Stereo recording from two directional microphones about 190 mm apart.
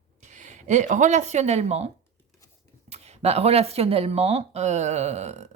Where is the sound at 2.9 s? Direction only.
35° right (ahead or behind).